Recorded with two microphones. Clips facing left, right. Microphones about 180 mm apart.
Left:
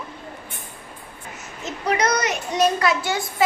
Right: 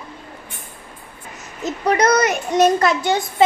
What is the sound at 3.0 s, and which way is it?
Speech, 20° right (ahead or behind).